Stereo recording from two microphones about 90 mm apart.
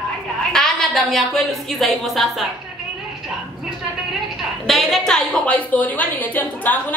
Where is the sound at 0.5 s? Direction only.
5° left (ahead or behind).